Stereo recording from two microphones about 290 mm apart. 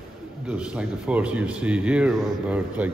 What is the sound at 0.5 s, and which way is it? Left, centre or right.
Speech, centre.